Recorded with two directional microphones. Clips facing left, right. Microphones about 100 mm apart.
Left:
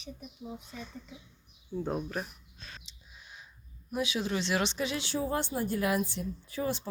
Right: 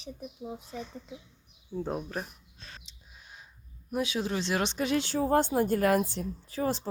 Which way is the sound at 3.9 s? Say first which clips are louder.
Right 1 dB; 40° right (ahead or behind).